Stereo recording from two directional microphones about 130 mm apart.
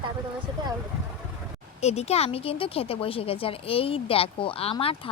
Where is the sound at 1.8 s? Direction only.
55° left (ahead or behind).